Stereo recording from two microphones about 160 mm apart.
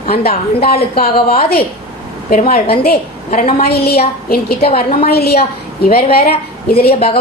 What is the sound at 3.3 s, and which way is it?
A woman's voice, 65° left (ahead or behind).